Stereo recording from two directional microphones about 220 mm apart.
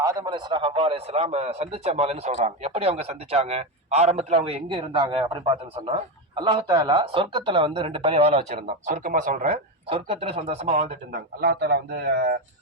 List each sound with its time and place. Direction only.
0.0 s a man's voice: 15° right (ahead or behind); by 10.8 s 30° right (ahead or behind)
11.1 s speech: 50° right (ahead or behind)